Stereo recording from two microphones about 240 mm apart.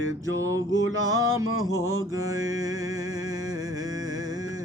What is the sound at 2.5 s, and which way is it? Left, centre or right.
Music, centre.